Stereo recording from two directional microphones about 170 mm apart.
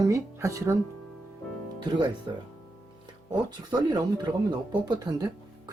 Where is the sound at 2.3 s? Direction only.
30° right (ahead or behind).